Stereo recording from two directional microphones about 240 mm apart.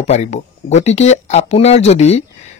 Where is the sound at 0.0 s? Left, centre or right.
Left.